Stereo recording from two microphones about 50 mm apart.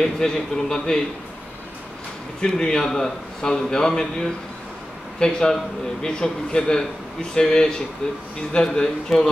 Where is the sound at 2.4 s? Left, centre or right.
Centre.